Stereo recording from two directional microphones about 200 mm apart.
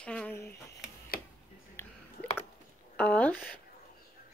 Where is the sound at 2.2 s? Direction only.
30° left (ahead or behind).